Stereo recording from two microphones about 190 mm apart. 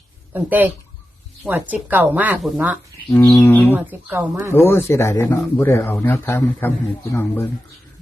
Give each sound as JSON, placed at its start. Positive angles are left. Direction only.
{"t": 0.3, "sound": "speech", "side_deg": -10}
{"t": 3.1, "sound": "bird", "side_deg": 5}
{"t": 3.4, "sound": "speech", "side_deg": 10}
{"t": 3.8, "sound": "speech", "side_deg": -10}
{"t": 4.5, "sound": "speech", "side_deg": 10}